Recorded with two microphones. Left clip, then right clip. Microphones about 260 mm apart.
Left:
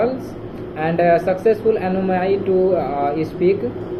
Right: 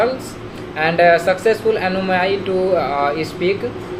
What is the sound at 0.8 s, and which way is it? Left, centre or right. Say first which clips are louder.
Speech: right 3 dB; centre.